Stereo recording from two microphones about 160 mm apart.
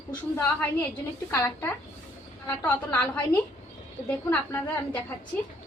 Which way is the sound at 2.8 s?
10° left (ahead or behind).